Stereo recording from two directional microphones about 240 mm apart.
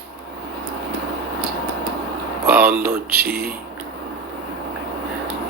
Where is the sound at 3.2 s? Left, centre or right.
Right.